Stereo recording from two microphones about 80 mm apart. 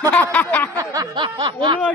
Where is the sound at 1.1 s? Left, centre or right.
Right.